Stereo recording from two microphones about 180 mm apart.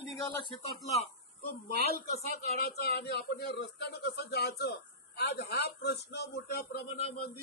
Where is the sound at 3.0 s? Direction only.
70° left (ahead or behind).